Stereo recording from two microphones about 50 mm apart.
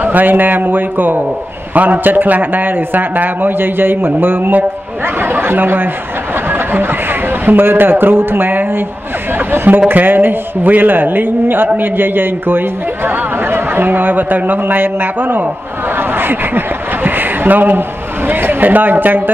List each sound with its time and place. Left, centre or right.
0.0 s a man's voice: right